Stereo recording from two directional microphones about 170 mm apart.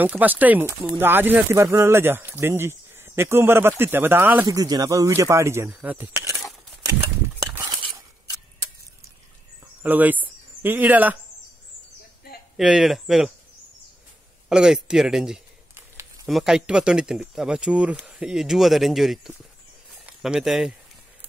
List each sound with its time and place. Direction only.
0.0 s speech: 10° right (ahead or behind)
4.6 s speech: 20° right (ahead or behind)
6.9 s a sound: 20° right (ahead or behind)
9.8 s speech: 10° right (ahead or behind)
12.5 s speech: centre (ahead or behind)
14.5 s speech: 5° right (ahead or behind)